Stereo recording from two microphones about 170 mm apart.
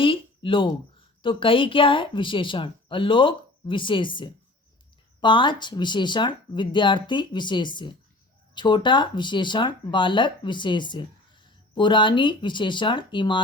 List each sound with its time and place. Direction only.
0.0 s speech: 30° left (ahead or behind)